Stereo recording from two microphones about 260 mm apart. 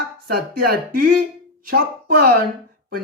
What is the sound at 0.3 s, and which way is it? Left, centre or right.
Speech, right.